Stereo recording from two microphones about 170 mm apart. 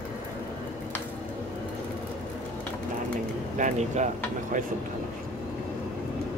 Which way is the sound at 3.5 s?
45° right (ahead or behind).